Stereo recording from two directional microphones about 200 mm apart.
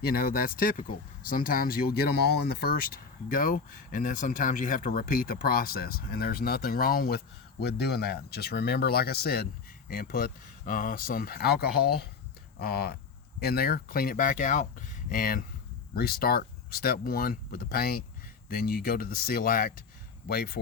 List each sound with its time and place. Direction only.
0.0 s speech: 50° left (ahead or behind)